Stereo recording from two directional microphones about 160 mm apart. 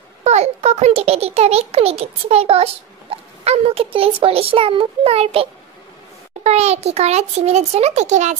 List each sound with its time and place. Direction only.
0.2 s a child's voice: 45° right (ahead or behind)